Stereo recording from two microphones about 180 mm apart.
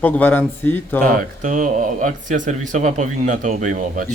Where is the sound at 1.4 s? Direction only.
45° right (ahead or behind).